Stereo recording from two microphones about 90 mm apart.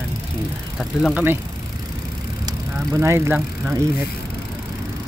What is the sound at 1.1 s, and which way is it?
Speech, 25° right (ahead or behind).